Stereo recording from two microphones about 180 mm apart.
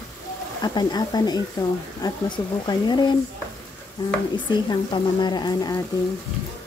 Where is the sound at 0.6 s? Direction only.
25° left (ahead or behind).